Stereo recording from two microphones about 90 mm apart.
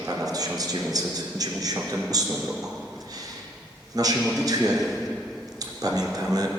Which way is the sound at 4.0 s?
45° right (ahead or behind).